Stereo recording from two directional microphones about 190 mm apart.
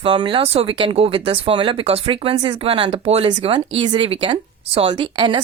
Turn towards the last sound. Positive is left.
turn(degrees=-25)  # may be behind; listen again after turning